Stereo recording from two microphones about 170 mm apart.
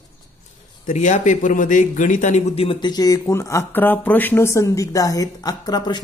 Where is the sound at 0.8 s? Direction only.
45° left (ahead or behind).